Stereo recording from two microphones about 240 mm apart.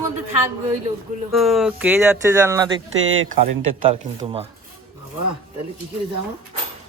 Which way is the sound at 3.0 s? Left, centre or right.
Right.